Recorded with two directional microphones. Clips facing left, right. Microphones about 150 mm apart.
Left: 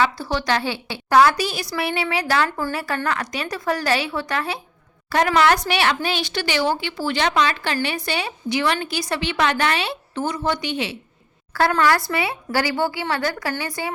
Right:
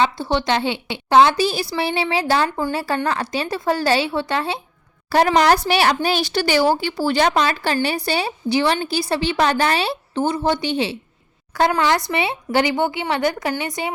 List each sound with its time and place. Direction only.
0.0 s a woman's voice: 25° right (ahead or behind)
11.5 s a woman's voice: 20° right (ahead or behind)